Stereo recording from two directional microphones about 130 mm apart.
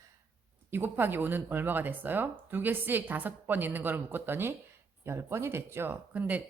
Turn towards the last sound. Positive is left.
turn(degrees=-10)  # may be behind; listen again after turning